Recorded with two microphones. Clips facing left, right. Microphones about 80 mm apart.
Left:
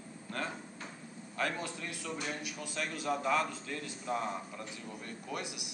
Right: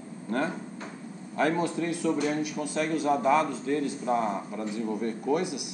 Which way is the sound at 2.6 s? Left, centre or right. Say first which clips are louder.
Right 8 dB; right.